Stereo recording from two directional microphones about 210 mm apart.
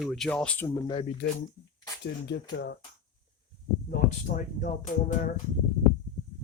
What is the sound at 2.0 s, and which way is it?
Speech, 55° left (ahead or behind).